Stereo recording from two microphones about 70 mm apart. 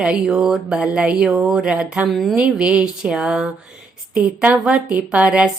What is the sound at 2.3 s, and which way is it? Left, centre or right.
Speech, centre.